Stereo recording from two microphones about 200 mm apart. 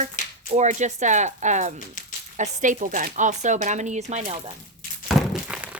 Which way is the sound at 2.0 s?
40° left (ahead or behind).